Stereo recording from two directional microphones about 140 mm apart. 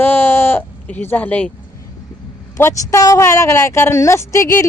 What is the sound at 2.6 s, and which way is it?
Speech, 20° left (ahead or behind).